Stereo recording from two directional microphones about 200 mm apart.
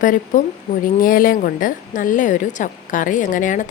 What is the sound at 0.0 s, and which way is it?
A woman's voice, 40° left (ahead or behind).